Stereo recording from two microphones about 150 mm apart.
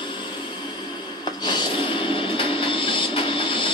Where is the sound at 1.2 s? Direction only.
30° left (ahead or behind).